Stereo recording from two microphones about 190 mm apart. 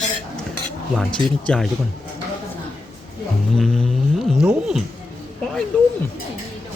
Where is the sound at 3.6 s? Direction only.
Centre (ahead or behind).